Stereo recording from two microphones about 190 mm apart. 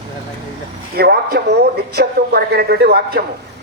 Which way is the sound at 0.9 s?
55° right (ahead or behind).